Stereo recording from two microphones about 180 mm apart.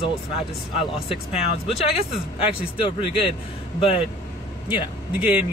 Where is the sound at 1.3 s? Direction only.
35° left (ahead or behind).